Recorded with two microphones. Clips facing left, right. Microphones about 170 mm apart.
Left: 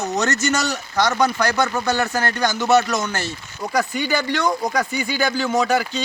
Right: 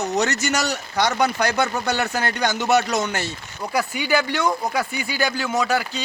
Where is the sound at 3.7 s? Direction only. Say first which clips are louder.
Even; 5° right (ahead or behind).